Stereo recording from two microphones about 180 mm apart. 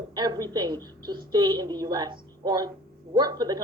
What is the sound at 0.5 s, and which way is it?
A woman's voice, 25° right (ahead or behind).